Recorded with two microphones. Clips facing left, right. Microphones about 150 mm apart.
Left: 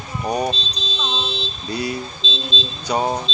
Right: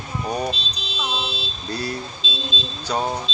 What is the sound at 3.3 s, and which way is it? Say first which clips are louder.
Speech: left 4 dB; 30° left (ahead or behind).